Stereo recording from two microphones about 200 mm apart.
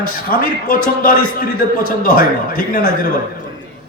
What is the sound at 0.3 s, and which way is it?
Speech, 45° left (ahead or behind).